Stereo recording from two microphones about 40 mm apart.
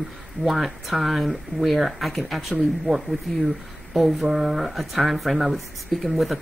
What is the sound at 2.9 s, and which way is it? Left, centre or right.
Speech, centre.